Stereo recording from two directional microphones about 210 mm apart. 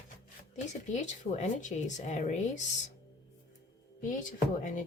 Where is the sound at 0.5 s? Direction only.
35° left (ahead or behind).